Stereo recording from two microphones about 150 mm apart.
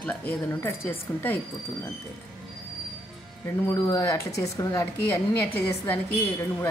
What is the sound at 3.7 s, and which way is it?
Speech, 25° left (ahead or behind).